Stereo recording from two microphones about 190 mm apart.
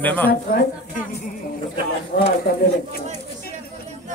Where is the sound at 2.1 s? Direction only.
60° left (ahead or behind).